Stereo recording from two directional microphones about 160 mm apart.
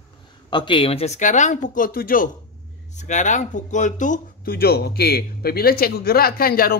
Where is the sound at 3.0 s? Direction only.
50° left (ahead or behind); by 6.7 s 70° left (ahead or behind).